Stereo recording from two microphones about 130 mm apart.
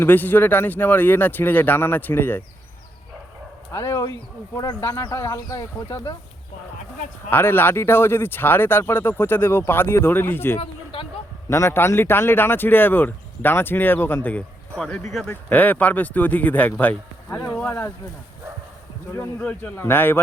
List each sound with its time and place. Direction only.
0.0 s speech: 15° left (ahead or behind)
3.7 s speech: 25° left (ahead or behind)
7.3 s speech: 15° left (ahead or behind)
10.9 s a sound: 45° left (ahead or behind)
11.4 s speech: 20° left (ahead or behind)
19.4 s speech: 10° left (ahead or behind)